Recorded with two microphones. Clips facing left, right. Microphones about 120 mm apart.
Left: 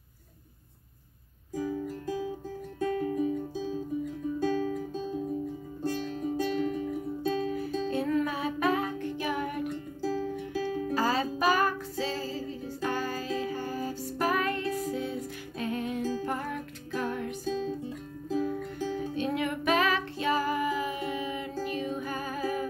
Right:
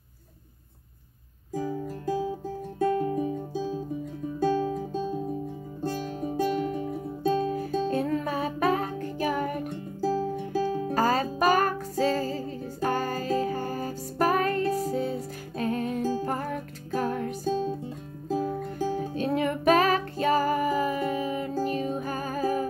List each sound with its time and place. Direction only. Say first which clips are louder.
1.5 s music: right 1 dB; 35° right (ahead or behind)
4.4 s music: right 5 dB; 35° right (ahead or behind)